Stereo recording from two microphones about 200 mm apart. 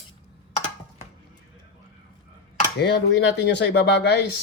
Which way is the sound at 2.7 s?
60° left (ahead or behind).